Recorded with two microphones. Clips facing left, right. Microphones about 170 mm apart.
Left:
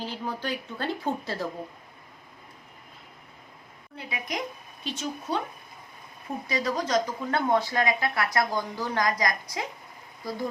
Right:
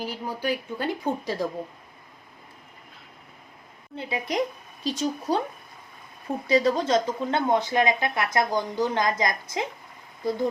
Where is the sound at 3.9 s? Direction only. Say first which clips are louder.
Right 7 dB; 30° right (ahead or behind).